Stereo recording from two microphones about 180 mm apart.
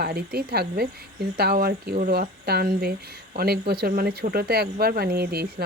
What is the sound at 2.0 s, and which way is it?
Speech, 45° right (ahead or behind).